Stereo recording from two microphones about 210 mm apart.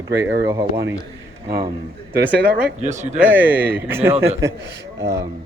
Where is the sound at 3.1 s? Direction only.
10° right (ahead or behind).